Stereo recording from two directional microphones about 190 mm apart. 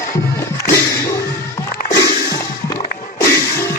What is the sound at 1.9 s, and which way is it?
Music, 20° left (ahead or behind).